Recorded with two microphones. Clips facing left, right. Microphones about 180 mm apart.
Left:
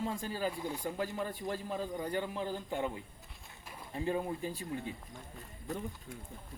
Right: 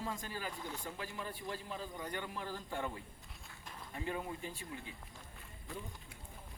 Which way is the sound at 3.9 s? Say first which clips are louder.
Left 7 dB; 30° left (ahead or behind).